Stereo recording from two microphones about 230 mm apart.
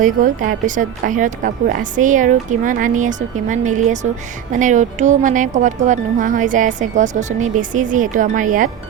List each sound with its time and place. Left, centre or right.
0.0 s a woman's voice: right